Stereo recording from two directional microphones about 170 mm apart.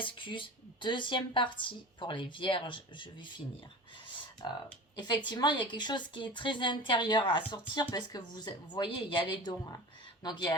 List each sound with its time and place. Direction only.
0.0 s a woman's voice: 30° left (ahead or behind)
4.4 s a woman's voice: 25° left (ahead or behind)